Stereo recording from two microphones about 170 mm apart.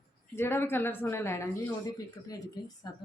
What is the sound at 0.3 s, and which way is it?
Speech, 15° left (ahead or behind).